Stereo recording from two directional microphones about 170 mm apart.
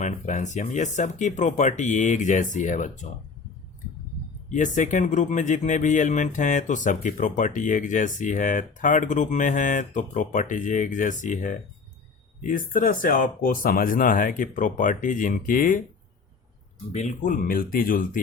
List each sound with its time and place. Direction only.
0.0 s speech: 45° left (ahead or behind)
4.4 s speech: 45° left (ahead or behind)
16.9 s speech: 40° left (ahead or behind)